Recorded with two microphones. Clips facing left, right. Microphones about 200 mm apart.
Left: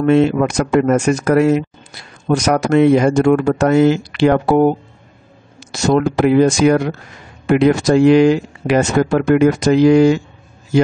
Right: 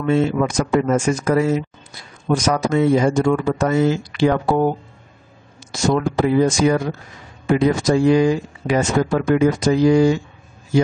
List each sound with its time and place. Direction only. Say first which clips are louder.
0.0 s speech: left 5 dB; 70° left (ahead or behind)